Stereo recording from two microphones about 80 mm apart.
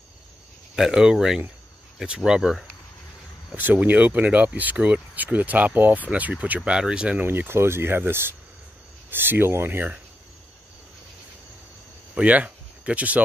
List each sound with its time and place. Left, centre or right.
0.7 s speech: centre
3.5 s speech: right
7.2 s speech: right
12.2 s speech: centre